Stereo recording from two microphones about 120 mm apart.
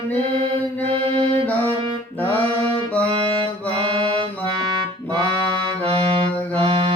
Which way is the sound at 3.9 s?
45° right (ahead or behind).